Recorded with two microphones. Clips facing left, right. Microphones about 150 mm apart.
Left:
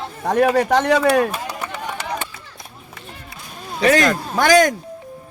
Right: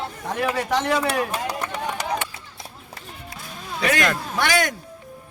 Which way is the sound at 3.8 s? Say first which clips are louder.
Left 6 dB; 40° left (ahead or behind).